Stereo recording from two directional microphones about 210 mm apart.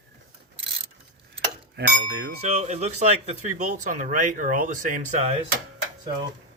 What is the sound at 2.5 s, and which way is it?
Speech, 30° right (ahead or behind).